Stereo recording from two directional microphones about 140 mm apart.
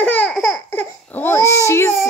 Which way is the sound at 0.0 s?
10° left (ahead or behind).